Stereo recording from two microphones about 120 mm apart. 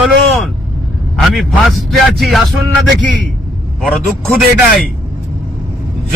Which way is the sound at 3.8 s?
Centre (ahead or behind).